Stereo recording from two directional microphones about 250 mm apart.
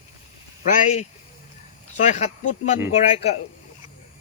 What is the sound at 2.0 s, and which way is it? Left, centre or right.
Speech, left.